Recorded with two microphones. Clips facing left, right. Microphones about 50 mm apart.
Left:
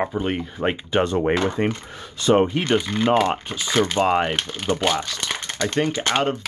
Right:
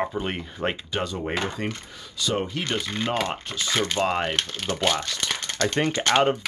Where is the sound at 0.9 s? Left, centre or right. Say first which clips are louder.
Left 8 dB; left.